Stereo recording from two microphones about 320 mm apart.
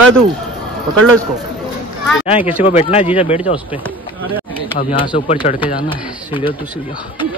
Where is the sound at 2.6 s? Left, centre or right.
Centre.